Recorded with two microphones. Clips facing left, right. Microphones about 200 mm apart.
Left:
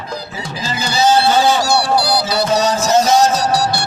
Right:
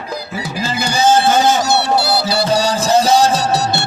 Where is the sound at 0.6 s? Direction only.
10° right (ahead or behind).